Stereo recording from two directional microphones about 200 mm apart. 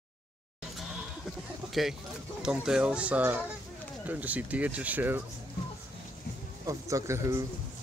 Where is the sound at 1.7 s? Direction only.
Centre (ahead or behind).